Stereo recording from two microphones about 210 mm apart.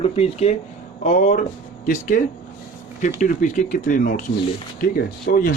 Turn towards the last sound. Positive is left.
turn(degrees=40)  # may be behind; listen again after turning